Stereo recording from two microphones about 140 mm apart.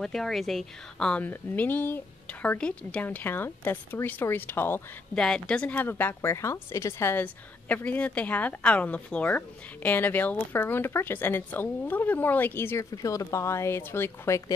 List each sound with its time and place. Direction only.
0.0 s speech: 5° left (ahead or behind)
5.1 s speech: 5° left (ahead or behind)